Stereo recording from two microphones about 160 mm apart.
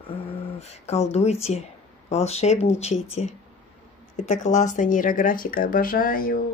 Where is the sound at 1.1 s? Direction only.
40° left (ahead or behind); by 6.4 s 60° left (ahead or behind).